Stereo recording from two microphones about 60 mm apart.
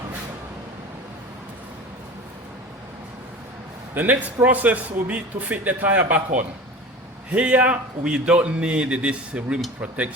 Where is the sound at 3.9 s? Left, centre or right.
Right.